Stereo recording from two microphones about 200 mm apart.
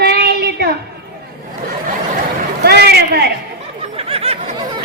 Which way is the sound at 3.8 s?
30° right (ahead or behind).